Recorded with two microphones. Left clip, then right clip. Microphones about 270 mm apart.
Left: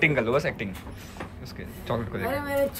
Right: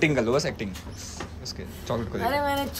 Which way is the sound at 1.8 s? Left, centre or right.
Centre.